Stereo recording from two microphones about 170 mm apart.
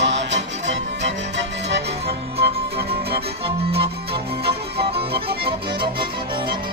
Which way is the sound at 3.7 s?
35° right (ahead or behind).